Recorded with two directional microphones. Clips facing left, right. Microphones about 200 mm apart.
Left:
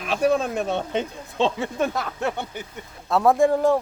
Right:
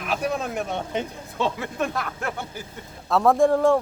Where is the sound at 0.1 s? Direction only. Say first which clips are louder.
Left 5 dB; 30° left (ahead or behind).